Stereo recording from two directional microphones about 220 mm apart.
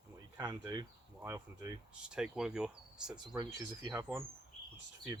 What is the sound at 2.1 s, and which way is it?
Speech, 5° right (ahead or behind).